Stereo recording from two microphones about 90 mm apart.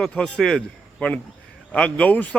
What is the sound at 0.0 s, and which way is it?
Speech, 5° left (ahead or behind).